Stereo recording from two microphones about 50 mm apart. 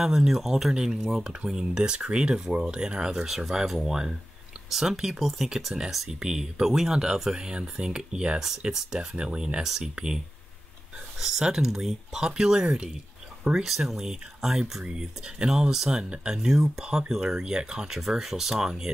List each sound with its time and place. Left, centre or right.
0.0 s speech: centre
11.1 s speech: centre